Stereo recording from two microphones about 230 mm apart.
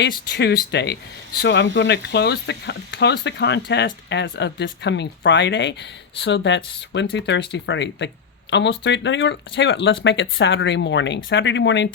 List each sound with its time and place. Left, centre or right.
0.3 s speech: left